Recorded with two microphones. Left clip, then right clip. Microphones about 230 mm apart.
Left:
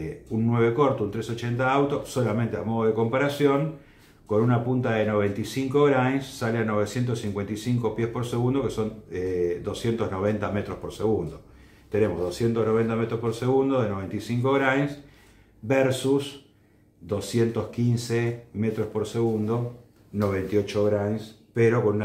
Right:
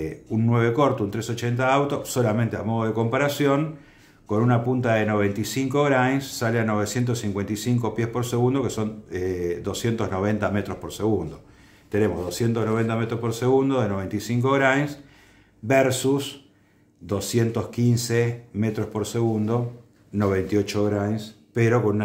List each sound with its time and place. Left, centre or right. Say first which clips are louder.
0.0 s speech: right 2 dB; right